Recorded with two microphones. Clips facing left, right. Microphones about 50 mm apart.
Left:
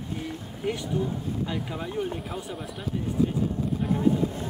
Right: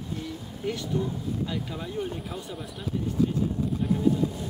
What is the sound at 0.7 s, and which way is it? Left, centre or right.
Speech, centre.